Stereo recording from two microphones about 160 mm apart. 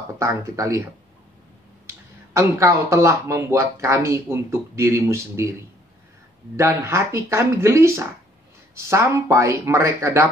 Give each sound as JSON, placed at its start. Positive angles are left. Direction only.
{"t": 0.2, "sound": "speech", "side_deg": -20}
{"t": 2.3, "sound": "speech", "side_deg": -20}